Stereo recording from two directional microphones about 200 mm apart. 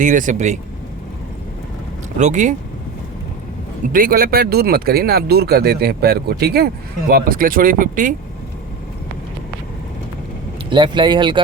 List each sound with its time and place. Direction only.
0.0 s speech: 40° right (ahead or behind)
2.1 s speech: 40° right (ahead or behind)
3.9 s speech: 45° right (ahead or behind)
10.7 s speech: 25° right (ahead or behind)